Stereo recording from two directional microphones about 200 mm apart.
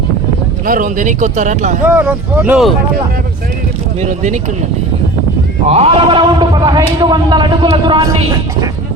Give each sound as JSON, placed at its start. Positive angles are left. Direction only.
{"t": 0.6, "sound": "speech", "side_deg": -40}
{"t": 1.8, "sound": "speech", "side_deg": -5}
{"t": 4.0, "sound": "speech", "side_deg": -40}
{"t": 5.6, "sound": "a man's voice", "side_deg": -30}